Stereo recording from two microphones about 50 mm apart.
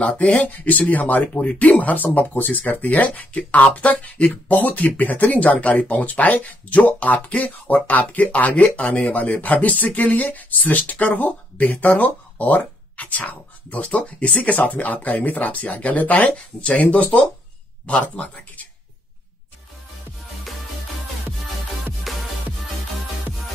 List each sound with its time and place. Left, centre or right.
0.2 s speech: left
1.3 s speech: left
22.1 s music: centre